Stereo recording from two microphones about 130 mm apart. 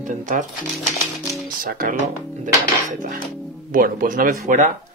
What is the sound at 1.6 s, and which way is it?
Speech, 90° right.